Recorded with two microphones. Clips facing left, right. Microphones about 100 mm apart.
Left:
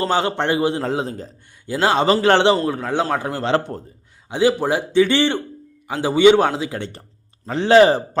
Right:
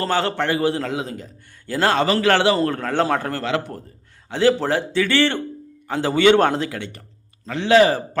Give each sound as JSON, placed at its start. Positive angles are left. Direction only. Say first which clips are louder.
{"t": 0.0, "sound": "a man's voice", "louder": "left 2 dB", "side_deg": 15}
{"t": 0.9, "sound": "a man's voice", "louder": "left 3 dB", "side_deg": 35}
{"t": 1.6, "sound": "a man's voice", "louder": "left 2 dB", "side_deg": 15}
{"t": 2.6, "sound": "a man's voice", "louder": "even", "side_deg": 10}
{"t": 3.4, "sound": "a man's voice", "louder": "left 4 dB", "side_deg": 30}
{"t": 4.3, "sound": "a man's voice", "louder": "even", "side_deg": 15}
{"t": 6.7, "sound": "a man's voice", "louder": "left 2 dB", "side_deg": 30}